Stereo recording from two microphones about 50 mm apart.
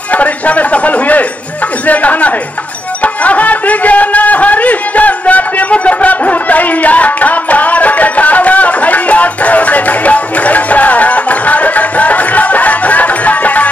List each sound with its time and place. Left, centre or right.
0.1 s a sound: left
1.9 s speech: left
3.0 s music: left